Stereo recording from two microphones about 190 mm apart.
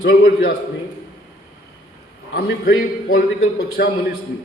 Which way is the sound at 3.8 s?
60° left (ahead or behind).